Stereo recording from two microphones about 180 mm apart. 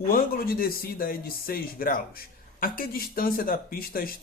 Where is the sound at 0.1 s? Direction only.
55° left (ahead or behind).